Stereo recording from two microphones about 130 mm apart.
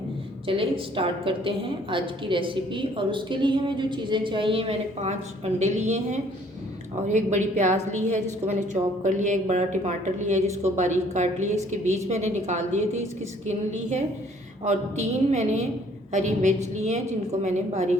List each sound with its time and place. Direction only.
0.4 s a woman's voice: 45° right (ahead or behind)
5.5 s a woman's voice: 65° right (ahead or behind)